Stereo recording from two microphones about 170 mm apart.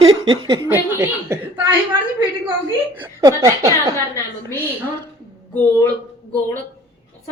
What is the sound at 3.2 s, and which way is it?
Speech, 20° right (ahead or behind).